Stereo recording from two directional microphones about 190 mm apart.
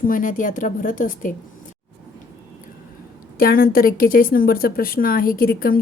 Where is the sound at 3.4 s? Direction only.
50° left (ahead or behind).